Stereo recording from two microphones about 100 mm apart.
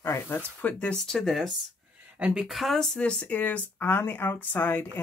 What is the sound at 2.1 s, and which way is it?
Speech, 10° right (ahead or behind).